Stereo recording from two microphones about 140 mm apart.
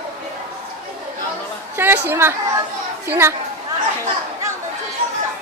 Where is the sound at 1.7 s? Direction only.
15° right (ahead or behind).